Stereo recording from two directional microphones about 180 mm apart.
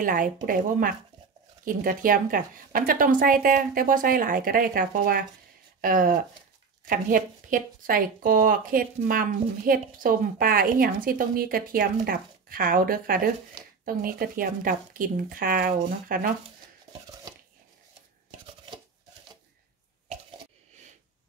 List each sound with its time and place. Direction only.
0.0 s speech: 50° right (ahead or behind)